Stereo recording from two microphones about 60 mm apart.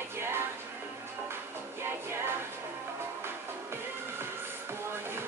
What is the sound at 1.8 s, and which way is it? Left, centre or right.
Music, right.